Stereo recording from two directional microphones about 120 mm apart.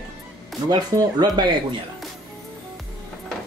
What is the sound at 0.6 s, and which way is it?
Speech, 30° right (ahead or behind).